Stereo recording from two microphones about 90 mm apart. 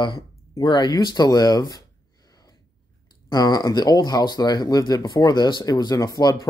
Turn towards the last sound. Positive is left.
turn(degrees=45)  # may be behind; listen again after turning